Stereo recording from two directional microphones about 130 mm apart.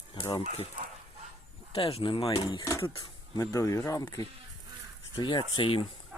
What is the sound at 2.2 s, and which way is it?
Speech, 35° left (ahead or behind).